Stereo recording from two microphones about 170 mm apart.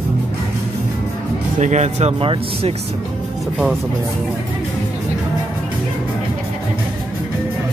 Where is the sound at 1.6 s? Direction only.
45° right (ahead or behind).